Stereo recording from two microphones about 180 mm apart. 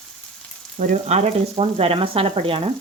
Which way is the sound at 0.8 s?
45° right (ahead or behind).